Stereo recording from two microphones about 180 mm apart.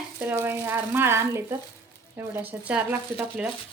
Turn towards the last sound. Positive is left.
turn(degrees=-5)  # may be behind; listen again after turning